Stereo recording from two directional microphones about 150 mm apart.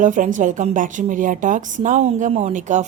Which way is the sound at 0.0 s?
60° right (ahead or behind).